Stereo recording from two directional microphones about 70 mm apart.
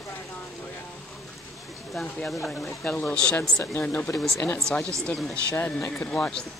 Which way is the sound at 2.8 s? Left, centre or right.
Centre.